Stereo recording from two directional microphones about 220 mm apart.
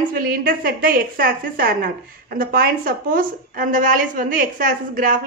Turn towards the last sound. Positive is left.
turn(degrees=-40)  # may be behind; listen again after turning